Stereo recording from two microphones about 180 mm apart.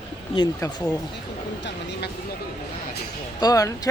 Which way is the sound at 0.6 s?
20° left (ahead or behind).